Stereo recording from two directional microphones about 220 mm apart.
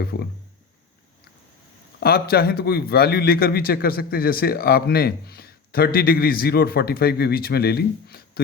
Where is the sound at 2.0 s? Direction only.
45° left (ahead or behind).